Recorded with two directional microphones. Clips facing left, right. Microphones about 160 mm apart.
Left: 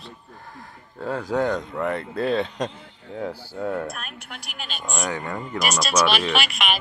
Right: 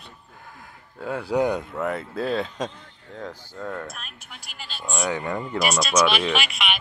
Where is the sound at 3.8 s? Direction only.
60° left (ahead or behind).